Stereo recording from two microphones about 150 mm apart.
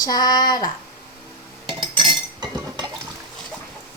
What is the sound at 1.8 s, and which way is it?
Chink, 30° right (ahead or behind).